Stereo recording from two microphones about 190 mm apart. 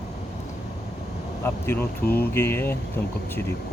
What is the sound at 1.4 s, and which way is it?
Speech, 10° left (ahead or behind).